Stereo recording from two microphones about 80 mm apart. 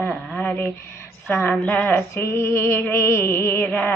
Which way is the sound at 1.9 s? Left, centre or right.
Left.